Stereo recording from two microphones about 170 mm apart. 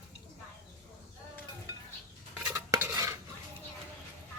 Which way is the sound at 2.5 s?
15° right (ahead or behind).